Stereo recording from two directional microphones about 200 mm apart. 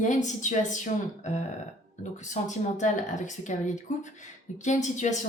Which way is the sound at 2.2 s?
35° left (ahead or behind).